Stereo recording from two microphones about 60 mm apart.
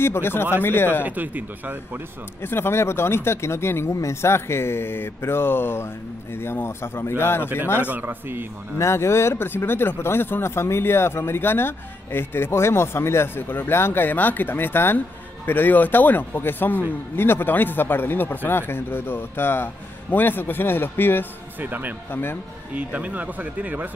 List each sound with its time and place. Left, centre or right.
0.0 s speech: left
1.0 s speech: right
2.4 s speech: left
7.8 s a man's voice: right
8.7 s speech: left
21.5 s a man's voice: right
22.1 s speech: left
22.8 s speech: right